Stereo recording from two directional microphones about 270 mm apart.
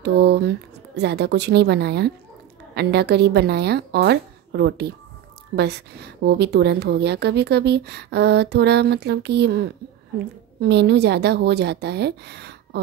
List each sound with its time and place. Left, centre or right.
0.0 s a woman's voice: right
10.7 s a woman's voice: right